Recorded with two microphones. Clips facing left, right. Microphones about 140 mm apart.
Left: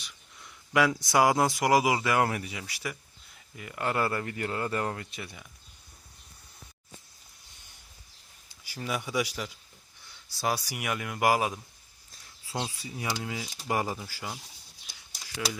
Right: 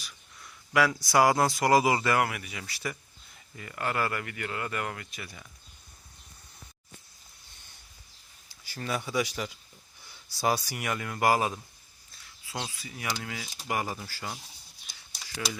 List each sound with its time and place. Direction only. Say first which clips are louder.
0.7 s speech: even; 20° left (ahead or behind)
2.2 s speech: left 3 dB; 30° left (ahead or behind)
2.6 s speech: right 1 dB; 15° left (ahead or behind)
8.6 s speech: even; 10° left (ahead or behind)
10.7 s speech: even; 10° left (ahead or behind)
12.5 s speech: left 3 dB; 20° left (ahead or behind)
13.9 s speech: even; 15° left (ahead or behind)